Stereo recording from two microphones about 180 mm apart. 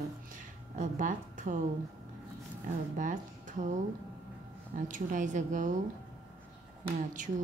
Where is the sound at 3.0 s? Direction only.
45° right (ahead or behind).